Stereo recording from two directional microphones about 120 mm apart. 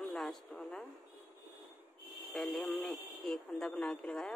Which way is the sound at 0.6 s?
15° left (ahead or behind).